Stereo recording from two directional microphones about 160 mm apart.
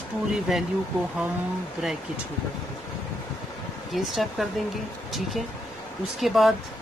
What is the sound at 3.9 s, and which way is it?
Speech, centre (ahead or behind).